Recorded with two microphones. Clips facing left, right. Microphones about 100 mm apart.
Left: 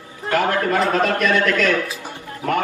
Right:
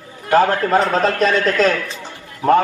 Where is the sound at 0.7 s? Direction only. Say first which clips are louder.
Right 4 dB; 30° right (ahead or behind).